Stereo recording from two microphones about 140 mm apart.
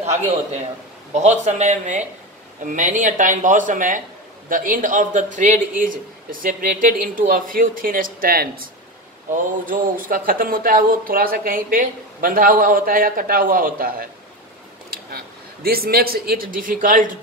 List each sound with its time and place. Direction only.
1.1 s speech: 55° right (ahead or behind); by 8.6 s 90° right
9.3 s speech: 80° right
15.6 s speech: 90° right